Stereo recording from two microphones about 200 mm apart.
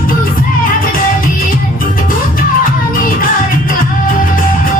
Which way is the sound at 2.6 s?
45° left (ahead or behind).